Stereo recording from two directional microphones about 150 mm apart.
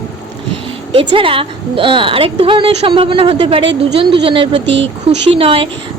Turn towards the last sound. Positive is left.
turn(degrees=-35)  # may be behind; listen again after turning